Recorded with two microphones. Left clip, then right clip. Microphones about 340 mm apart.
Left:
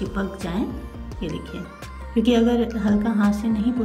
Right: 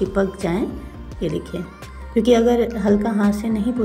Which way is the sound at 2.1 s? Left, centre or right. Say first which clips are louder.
Right 5 dB; centre.